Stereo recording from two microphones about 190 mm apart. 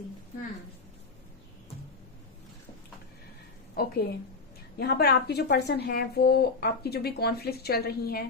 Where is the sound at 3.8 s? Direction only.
55° left (ahead or behind).